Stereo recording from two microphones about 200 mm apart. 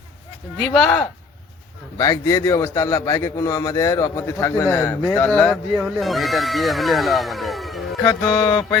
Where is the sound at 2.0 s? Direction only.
15° left (ahead or behind); by 7.8 s centre (ahead or behind).